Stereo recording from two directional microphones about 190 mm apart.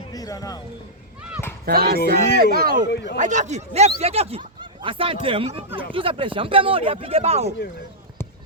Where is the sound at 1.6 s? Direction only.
55° right (ahead or behind).